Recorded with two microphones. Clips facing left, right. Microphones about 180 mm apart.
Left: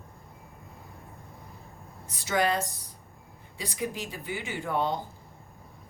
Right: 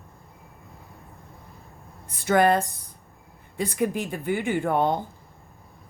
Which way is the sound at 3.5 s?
55° right (ahead or behind).